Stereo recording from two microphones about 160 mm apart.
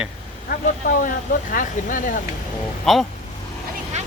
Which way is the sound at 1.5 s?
55° left (ahead or behind).